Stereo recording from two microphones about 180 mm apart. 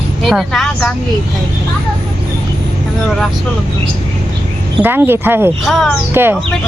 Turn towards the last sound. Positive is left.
turn(degrees=-10)  # may be behind; listen again after turning